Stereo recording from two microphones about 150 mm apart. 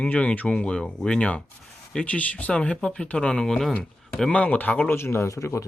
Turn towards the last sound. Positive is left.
turn(degrees=20)  # may be behind; listen again after turning